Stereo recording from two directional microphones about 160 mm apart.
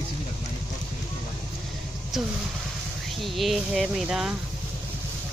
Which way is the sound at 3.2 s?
Centre (ahead or behind).